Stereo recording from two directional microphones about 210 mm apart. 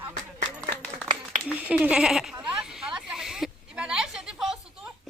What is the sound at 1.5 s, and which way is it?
Speech, 5° right (ahead or behind).